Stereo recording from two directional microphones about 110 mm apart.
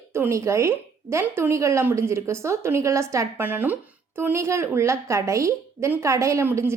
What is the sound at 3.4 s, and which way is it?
A woman's voice, 15° right (ahead or behind).